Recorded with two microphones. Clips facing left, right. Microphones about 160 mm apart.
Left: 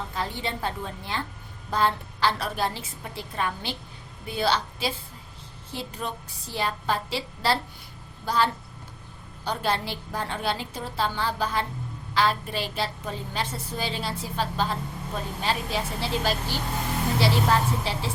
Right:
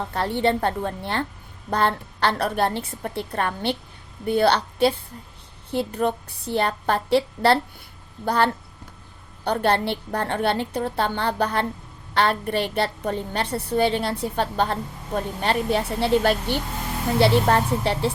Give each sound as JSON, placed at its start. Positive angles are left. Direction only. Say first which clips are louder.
{"t": 0.1, "sound": "a woman's voice", "louder": "right 13 dB", "side_deg": -65}